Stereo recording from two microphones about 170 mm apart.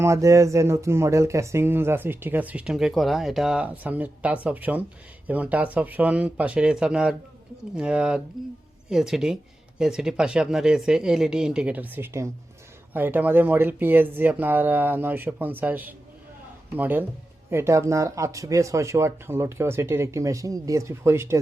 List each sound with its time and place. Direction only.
0.0 s speech: 20° right (ahead or behind)